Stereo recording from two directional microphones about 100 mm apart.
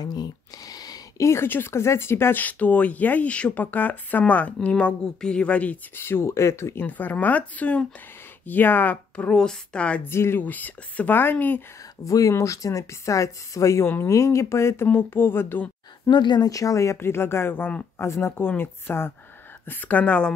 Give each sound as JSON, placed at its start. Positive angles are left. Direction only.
{"t": 0.0, "sound": "speech", "side_deg": 45}
{"t": 10.0, "sound": "speech", "side_deg": 25}
{"t": 12.0, "sound": "speech", "side_deg": 35}
{"t": 16.1, "sound": "speech", "side_deg": 50}